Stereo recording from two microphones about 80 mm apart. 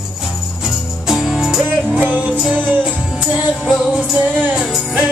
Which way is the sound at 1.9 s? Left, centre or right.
Centre.